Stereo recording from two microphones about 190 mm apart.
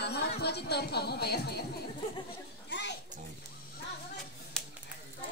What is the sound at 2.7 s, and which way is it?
Children playing, 65° left (ahead or behind).